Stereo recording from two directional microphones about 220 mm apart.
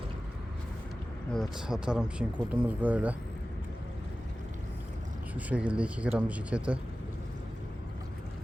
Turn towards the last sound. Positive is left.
turn(degrees=-5)  # may be behind; listen again after turning